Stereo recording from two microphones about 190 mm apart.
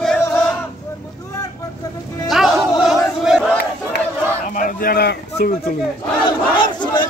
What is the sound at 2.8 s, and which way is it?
Battle cry, centre (ahead or behind).